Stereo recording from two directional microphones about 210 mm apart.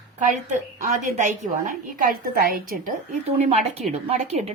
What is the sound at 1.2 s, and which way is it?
A woman's voice, 40° right (ahead or behind).